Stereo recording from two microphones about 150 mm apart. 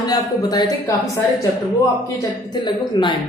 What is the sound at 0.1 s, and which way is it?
Speech, 25° left (ahead or behind).